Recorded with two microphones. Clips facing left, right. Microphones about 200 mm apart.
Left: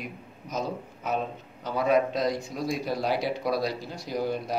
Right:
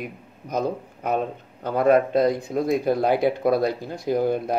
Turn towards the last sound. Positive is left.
turn(degrees=-55)  # may be behind; listen again after turning